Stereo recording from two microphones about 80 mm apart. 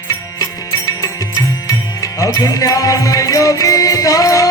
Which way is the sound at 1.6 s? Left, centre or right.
Left.